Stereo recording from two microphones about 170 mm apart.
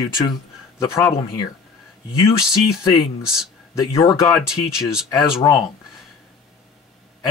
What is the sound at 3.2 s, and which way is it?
Speech, 5° right (ahead or behind).